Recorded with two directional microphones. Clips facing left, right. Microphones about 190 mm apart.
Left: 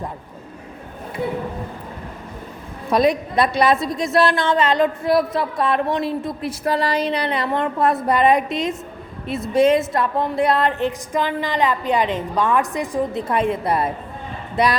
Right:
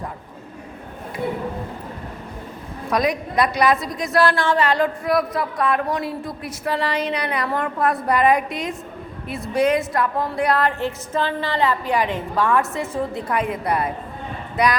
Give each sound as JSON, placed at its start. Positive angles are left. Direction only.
{"t": 2.9, "sound": "a woman's voice", "side_deg": 30}
{"t": 6.7, "sound": "a woman's voice", "side_deg": 40}